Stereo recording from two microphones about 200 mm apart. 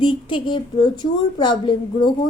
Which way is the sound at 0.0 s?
25° left (ahead or behind).